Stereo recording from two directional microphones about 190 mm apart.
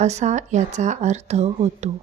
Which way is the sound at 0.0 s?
35° right (ahead or behind).